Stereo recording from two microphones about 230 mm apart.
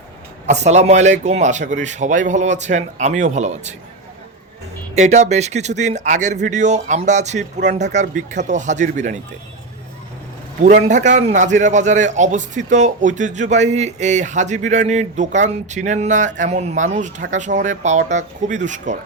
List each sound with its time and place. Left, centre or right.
0.4 s a man's voice: right
4.9 s a man's voice: right
10.6 s a man's voice: right